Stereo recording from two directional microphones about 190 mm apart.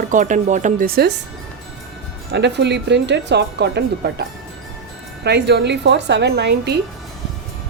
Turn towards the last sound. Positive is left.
turn(degrees=-60)  # may be behind; listen again after turning